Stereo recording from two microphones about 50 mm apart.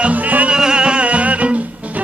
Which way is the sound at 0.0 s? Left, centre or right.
Right.